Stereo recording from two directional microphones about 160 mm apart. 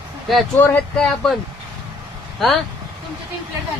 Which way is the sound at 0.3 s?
Centre (ahead or behind).